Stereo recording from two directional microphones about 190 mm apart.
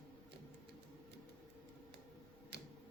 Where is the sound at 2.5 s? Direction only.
60° right (ahead or behind).